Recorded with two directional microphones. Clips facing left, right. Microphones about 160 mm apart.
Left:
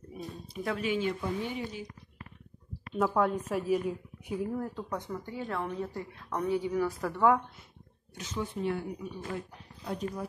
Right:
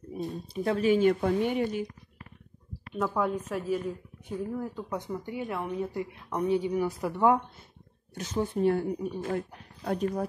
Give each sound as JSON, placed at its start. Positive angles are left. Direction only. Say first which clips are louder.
{"t": 0.2, "sound": "speech", "louder": "right 6 dB", "side_deg": -35}
{"t": 1.2, "sound": "speech", "louder": "right 8 dB", "side_deg": -60}
{"t": 3.0, "sound": "a woman's voice", "louder": "left 1 dB", "side_deg": 0}
{"t": 4.9, "sound": "a woman's voice", "louder": "right 4 dB", "side_deg": -15}
{"t": 8.1, "sound": "a woman's voice", "louder": "right 6 dB", "side_deg": -45}